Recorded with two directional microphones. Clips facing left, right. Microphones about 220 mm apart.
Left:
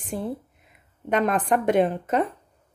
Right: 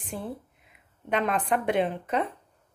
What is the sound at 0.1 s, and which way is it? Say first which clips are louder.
A woman's voice: left 6 dB; 40° left (ahead or behind).